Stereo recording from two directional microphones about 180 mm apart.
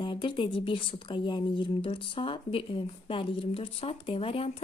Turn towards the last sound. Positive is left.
turn(degrees=30)  # may be behind; listen again after turning